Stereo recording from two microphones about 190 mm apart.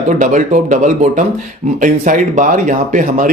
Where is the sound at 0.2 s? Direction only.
40° right (ahead or behind).